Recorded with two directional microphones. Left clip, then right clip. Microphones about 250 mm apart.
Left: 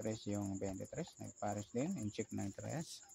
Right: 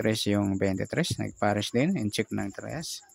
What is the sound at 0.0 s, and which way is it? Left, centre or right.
Speech, right.